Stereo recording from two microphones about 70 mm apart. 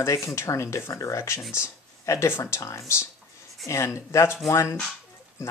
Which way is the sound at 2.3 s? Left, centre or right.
Left.